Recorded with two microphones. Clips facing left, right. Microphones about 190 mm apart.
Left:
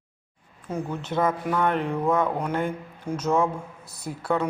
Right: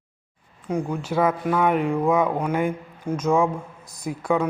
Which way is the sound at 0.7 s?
15° right (ahead or behind).